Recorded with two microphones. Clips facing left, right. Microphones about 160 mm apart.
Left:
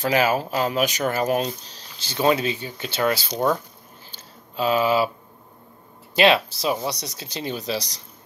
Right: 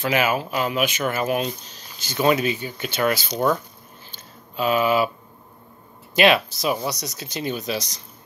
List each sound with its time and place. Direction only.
0.0 s speech: 35° left (ahead or behind)
4.1 s a sound: 30° left (ahead or behind)
6.1 s speech: 30° left (ahead or behind)